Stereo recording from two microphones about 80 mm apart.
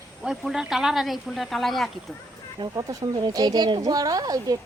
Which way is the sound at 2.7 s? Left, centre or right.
Right.